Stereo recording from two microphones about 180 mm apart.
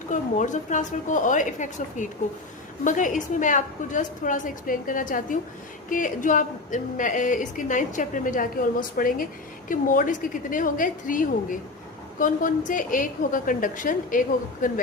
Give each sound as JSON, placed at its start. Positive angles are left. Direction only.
{"t": 0.1, "sound": "a woman's voice", "side_deg": 45}